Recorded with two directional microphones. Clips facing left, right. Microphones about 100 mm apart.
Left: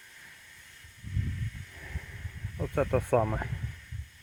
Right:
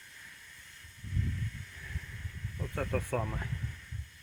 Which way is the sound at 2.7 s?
50° left (ahead or behind).